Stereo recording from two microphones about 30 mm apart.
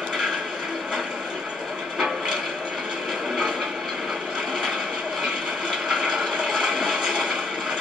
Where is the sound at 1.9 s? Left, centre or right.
Centre.